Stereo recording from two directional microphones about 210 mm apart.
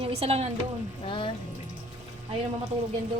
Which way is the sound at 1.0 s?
25° left (ahead or behind).